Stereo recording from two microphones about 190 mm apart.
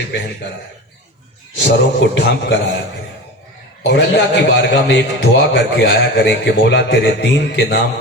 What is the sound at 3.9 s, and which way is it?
A man's voice, 65° left (ahead or behind).